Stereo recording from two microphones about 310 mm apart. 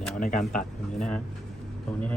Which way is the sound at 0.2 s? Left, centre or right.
Left.